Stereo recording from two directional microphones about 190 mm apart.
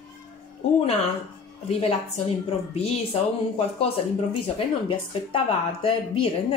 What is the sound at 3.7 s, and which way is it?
A woman's voice, 30° left (ahead or behind).